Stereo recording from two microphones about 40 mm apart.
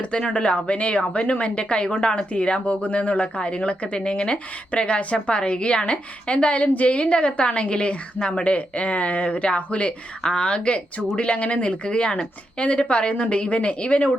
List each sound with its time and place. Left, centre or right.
0.0 s speech: left